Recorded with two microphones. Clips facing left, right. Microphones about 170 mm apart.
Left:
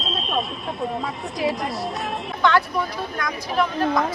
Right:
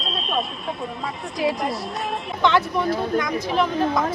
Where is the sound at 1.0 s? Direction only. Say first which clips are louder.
Right 1 dB; centre (ahead or behind).